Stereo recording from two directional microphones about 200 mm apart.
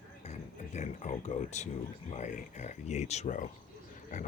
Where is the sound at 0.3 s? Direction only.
35° left (ahead or behind).